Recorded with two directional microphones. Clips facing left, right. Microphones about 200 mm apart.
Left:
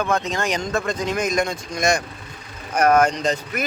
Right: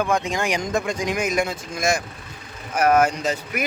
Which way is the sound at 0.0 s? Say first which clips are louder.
Even; 15° right (ahead or behind).